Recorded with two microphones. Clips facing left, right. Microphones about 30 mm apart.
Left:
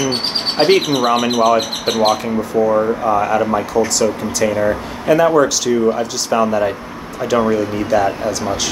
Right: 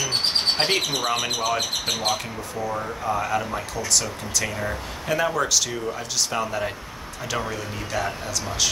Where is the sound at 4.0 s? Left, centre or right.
Centre.